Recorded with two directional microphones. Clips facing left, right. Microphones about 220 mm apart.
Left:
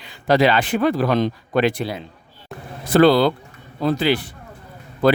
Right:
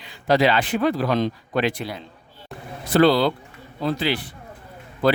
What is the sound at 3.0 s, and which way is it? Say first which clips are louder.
Speech: left 3 dB; 50° left (ahead or behind).